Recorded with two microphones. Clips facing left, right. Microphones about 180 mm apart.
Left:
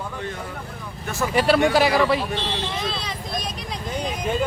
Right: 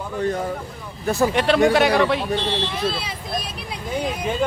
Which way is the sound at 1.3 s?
Centre (ahead or behind).